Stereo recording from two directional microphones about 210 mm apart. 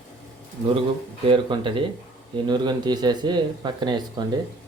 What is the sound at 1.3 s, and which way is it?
Speech, 25° right (ahead or behind).